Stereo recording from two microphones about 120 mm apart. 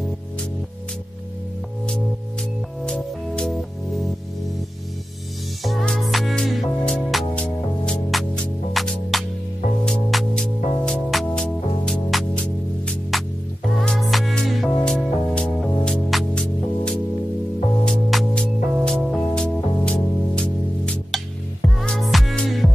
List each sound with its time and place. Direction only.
2.8 s music: 5° left (ahead or behind)
5.6 s music: centre (ahead or behind)